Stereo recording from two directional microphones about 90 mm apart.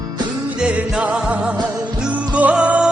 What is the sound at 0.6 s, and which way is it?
Music, 10° right (ahead or behind).